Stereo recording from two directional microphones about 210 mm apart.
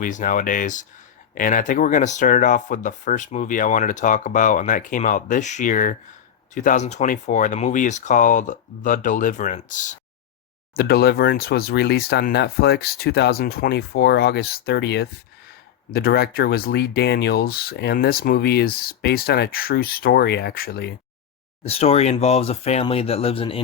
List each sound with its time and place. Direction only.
0.0 s speech: 40° left (ahead or behind)
10.8 s speech: 45° left (ahead or behind)
21.7 s speech: 30° left (ahead or behind)